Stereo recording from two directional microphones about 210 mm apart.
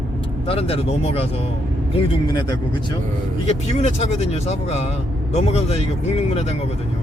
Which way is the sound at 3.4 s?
30° left (ahead or behind).